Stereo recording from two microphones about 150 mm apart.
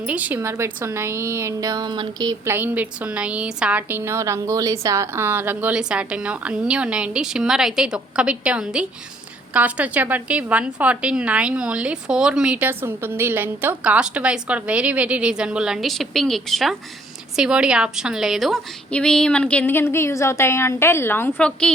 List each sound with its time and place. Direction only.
0.0 s a woman's voice: 10° right (ahead or behind); by 2.5 s 25° right (ahead or behind)
2.5 s a woman's voice: 10° right (ahead or behind); by 21.7 s 10° left (ahead or behind)